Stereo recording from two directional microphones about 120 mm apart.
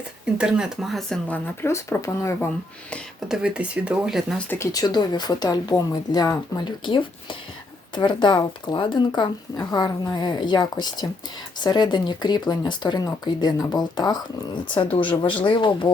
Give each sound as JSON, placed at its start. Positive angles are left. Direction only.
{"t": 0.3, "sound": "speech", "side_deg": -10}
{"t": 1.3, "sound": "speech", "side_deg": 20}
{"t": 3.2, "sound": "speech", "side_deg": -5}
{"t": 4.4, "sound": "speech", "side_deg": 20}